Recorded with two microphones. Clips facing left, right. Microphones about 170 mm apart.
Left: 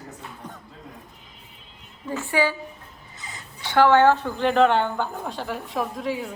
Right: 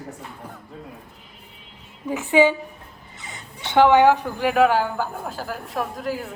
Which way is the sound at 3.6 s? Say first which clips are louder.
Right 2 dB; 20° right (ahead or behind).